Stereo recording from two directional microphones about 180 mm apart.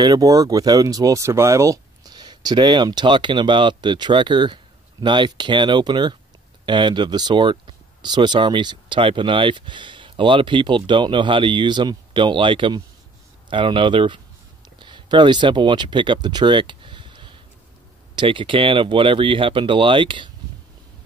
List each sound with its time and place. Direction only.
0.0 s speech: 20° right (ahead or behind)